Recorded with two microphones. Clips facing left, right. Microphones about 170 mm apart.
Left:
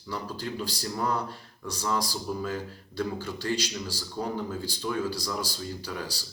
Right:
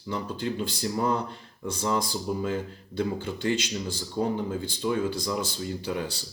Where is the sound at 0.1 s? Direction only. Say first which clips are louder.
Right 4 dB; 25° right (ahead or behind).